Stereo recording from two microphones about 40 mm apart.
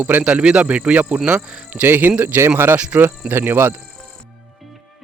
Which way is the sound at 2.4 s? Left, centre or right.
Right.